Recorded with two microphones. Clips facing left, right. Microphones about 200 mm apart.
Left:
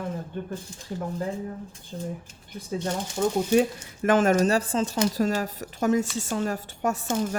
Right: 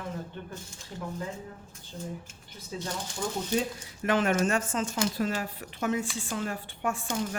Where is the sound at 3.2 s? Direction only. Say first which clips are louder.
Left 9 dB; 50° left (ahead or behind).